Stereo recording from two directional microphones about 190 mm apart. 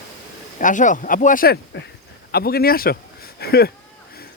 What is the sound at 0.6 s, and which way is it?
Speech, 40° left (ahead or behind).